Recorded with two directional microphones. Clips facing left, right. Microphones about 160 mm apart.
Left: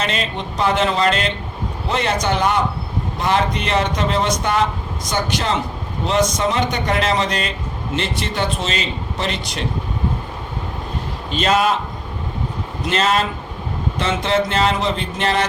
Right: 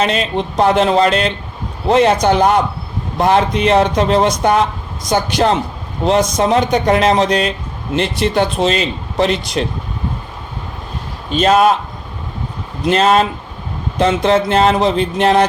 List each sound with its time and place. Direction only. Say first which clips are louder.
0.3 s speech: right 7 dB; 45° right (ahead or behind)
11.3 s speech: right 6 dB; 45° right (ahead or behind)
12.9 s speech: right 6 dB; 50° right (ahead or behind)